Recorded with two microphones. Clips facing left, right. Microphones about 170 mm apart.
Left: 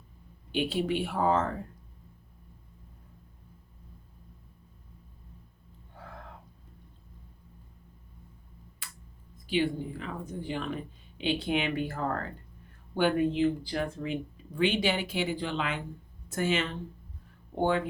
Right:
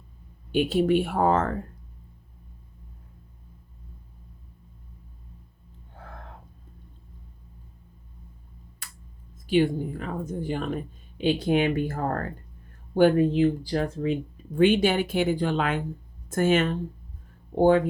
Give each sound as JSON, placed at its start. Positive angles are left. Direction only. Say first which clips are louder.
{"t": 0.5, "sound": "speech", "louder": "right 7 dB", "side_deg": -45}
{"t": 9.5, "sound": "speech", "louder": "right 6 dB", "side_deg": -50}
{"t": 14.5, "sound": "speech", "louder": "right 7 dB", "side_deg": -50}